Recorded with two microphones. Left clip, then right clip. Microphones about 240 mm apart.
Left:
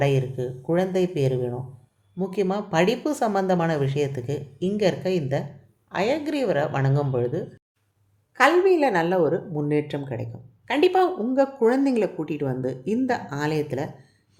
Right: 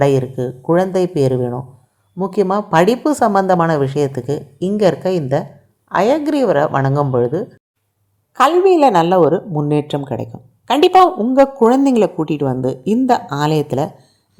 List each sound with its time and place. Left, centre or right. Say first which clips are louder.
0.0 s a woman's voice: right 9 dB; right